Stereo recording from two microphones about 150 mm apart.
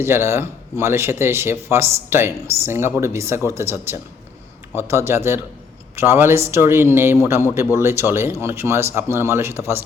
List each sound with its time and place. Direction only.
0.0 s speech: 15° right (ahead or behind)